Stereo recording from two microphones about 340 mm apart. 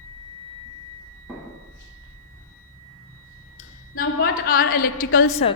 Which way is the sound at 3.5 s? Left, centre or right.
Left.